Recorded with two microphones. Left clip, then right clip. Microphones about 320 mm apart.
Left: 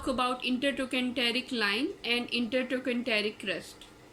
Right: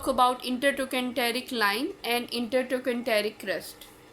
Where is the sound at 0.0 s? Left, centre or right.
Centre.